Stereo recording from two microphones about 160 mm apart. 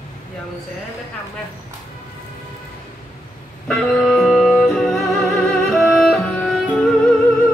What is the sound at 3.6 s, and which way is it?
Music, 5° left (ahead or behind).